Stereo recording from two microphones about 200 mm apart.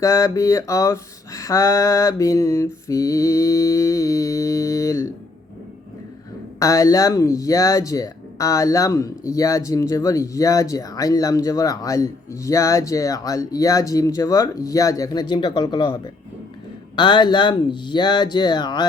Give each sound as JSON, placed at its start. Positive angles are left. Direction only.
{"t": 0.0, "sound": "speech", "side_deg": 15}
{"t": 6.6, "sound": "speech", "side_deg": 15}